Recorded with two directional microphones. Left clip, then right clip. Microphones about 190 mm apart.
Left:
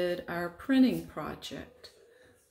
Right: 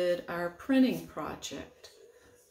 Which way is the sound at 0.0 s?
45° left (ahead or behind).